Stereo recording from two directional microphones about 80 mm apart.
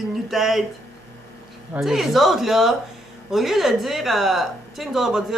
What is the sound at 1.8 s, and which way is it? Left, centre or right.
A woman's voice, centre.